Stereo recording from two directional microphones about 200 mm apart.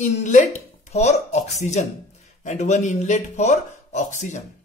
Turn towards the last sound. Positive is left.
turn(degrees=35)  # may be behind; listen again after turning